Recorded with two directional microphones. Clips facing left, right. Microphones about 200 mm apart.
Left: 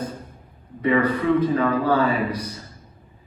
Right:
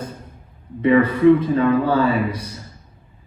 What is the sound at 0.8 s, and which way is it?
Speech, 25° right (ahead or behind).